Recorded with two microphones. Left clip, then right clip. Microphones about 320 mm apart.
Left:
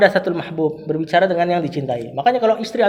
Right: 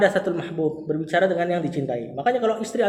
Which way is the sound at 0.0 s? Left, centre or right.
Left.